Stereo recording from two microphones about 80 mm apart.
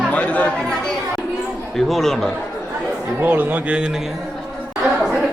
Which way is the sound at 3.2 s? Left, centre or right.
Right.